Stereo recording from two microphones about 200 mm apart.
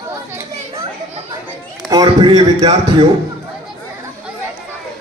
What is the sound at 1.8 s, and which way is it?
Speech, 20° right (ahead or behind).